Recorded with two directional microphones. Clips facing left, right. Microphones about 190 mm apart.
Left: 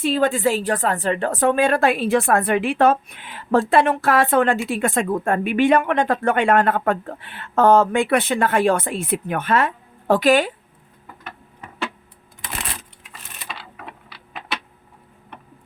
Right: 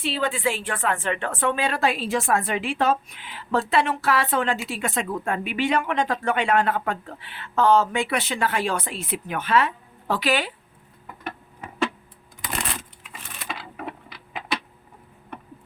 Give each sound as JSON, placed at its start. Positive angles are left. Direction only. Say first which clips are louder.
{"t": 0.0, "sound": "a woman's voice", "louder": "left 6 dB", "side_deg": 45}